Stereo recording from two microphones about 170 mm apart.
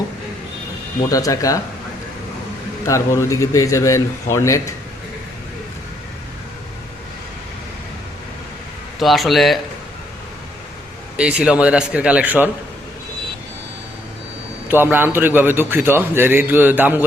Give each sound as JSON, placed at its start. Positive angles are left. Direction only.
{"t": 1.1, "sound": "speech", "side_deg": 20}
{"t": 2.8, "sound": "a man's voice", "side_deg": 20}
{"t": 9.0, "sound": "speech", "side_deg": 0}
{"t": 11.2, "sound": "a man's voice", "side_deg": -5}
{"t": 14.7, "sound": "a man's voice", "side_deg": -10}